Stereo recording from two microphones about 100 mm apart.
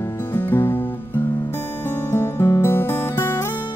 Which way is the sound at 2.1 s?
25° left (ahead or behind).